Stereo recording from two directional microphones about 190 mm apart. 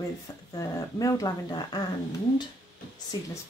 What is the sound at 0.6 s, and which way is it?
Speech, 20° left (ahead or behind).